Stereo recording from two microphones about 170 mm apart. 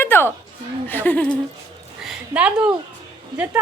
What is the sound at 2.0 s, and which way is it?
Speech, 5° right (ahead or behind).